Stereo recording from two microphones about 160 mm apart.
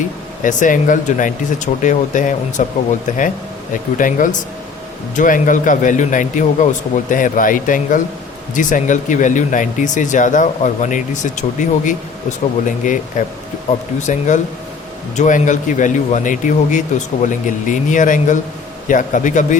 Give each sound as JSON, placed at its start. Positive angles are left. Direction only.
{"t": 0.4, "sound": "speech", "side_deg": 55}